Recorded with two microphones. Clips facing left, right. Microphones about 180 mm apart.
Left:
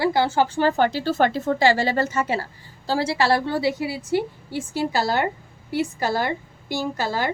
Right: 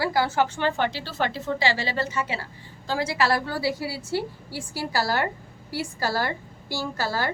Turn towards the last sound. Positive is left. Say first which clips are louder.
# left 3 dB
turn(degrees=20)  # may be behind; listen again after turning